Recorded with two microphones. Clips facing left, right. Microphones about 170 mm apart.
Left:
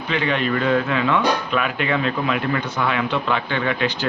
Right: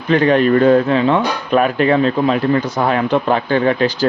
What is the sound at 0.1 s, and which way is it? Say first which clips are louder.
Speech: right 10 dB; 45° right (ahead or behind).